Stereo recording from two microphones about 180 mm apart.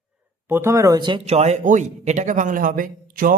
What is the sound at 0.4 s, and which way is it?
Speech, 15° right (ahead or behind).